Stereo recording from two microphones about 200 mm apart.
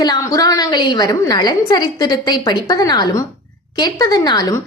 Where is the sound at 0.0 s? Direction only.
20° left (ahead or behind).